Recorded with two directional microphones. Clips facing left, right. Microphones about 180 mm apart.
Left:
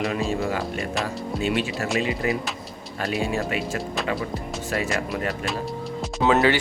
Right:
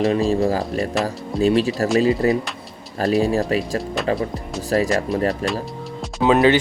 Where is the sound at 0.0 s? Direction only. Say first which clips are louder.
Right 7 dB; 35° right (ahead or behind).